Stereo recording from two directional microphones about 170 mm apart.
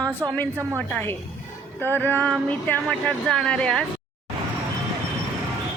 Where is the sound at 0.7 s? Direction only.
10° left (ahead or behind).